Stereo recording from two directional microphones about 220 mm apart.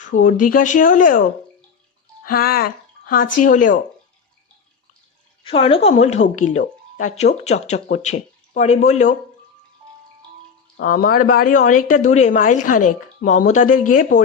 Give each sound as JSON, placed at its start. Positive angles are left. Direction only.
{"t": 0.1, "sound": "a woman's voice", "side_deg": 35}
{"t": 5.4, "sound": "speech", "side_deg": 25}
{"t": 10.8, "sound": "speech", "side_deg": 40}